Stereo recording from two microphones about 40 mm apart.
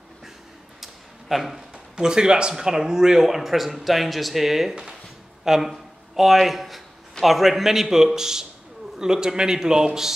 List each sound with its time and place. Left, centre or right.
1.3 s speech: centre
2.0 s speech: centre